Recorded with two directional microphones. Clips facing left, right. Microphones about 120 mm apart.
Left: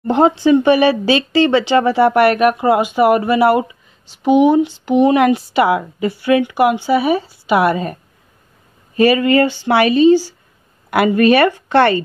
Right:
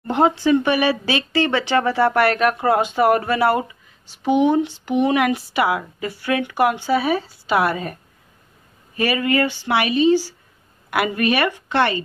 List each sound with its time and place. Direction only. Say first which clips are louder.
0.0 s speech: left 5 dB; 25° left (ahead or behind); by 12.0 s 45° left (ahead or behind)